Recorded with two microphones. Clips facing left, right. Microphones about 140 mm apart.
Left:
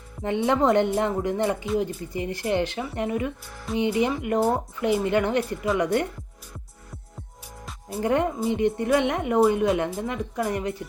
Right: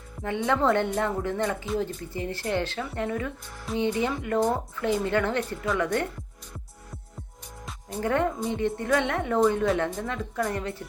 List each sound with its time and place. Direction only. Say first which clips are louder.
0.2 s speech: left 3 dB; 20° left (ahead or behind)
8.0 s speech: left 3 dB; 15° left (ahead or behind)